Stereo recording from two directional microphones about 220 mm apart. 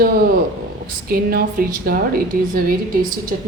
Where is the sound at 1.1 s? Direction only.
40° right (ahead or behind).